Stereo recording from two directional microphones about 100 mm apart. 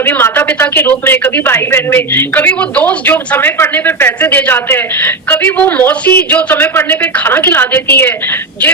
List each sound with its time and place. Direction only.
0.0 s speech: 20° left (ahead or behind)